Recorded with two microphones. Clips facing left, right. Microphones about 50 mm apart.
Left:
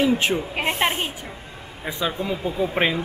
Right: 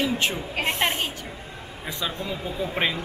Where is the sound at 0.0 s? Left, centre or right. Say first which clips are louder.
Left 5 dB; left.